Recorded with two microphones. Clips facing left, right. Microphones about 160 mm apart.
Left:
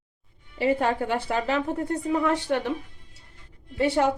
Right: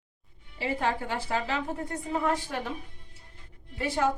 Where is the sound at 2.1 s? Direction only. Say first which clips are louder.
Left 5 dB; 75° left (ahead or behind).